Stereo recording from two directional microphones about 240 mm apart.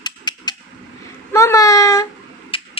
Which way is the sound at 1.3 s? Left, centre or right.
Centre.